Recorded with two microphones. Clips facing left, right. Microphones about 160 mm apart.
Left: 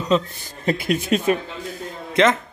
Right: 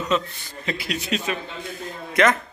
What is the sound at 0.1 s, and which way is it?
Speech, 40° left (ahead or behind).